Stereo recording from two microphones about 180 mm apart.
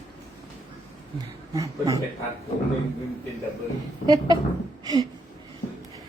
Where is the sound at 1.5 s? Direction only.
20° right (ahead or behind).